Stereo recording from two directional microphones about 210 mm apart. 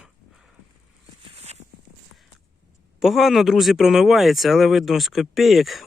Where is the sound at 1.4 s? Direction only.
30° right (ahead or behind).